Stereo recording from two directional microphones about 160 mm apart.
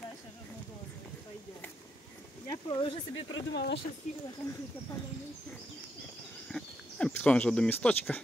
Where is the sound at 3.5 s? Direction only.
90° left.